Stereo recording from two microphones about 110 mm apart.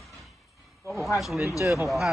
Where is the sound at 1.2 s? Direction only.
Centre (ahead or behind).